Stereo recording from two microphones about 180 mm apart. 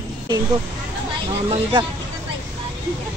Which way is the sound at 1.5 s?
25° right (ahead or behind).